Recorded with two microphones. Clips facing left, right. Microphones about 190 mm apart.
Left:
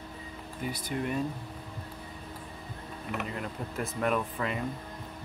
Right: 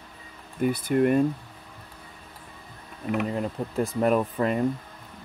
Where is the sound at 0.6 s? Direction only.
55° right (ahead or behind).